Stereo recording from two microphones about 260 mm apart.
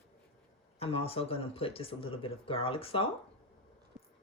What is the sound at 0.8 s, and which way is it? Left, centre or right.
A man's voice, left.